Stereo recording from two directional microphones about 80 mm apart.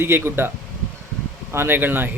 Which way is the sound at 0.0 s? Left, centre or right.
Right.